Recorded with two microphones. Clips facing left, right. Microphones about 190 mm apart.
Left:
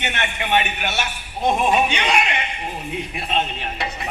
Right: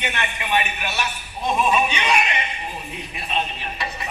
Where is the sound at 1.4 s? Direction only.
60° left (ahead or behind).